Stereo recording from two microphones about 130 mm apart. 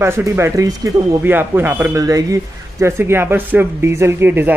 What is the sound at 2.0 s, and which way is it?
Speech, 25° right (ahead or behind).